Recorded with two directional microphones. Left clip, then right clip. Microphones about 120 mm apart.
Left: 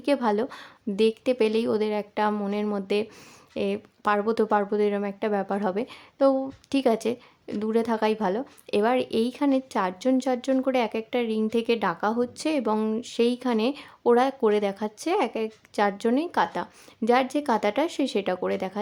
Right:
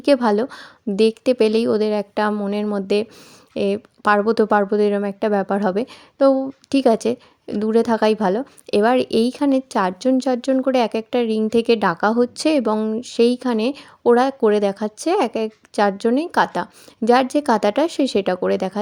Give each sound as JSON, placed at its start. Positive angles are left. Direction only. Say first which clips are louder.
{"t": 0.0, "sound": "a woman's voice", "louder": "right 8 dB", "side_deg": -45}
{"t": 12.7, "sound": "speech", "louder": "right 5 dB", "side_deg": -30}